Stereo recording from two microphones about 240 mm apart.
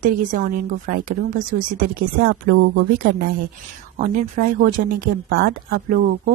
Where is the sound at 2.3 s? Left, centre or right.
Right.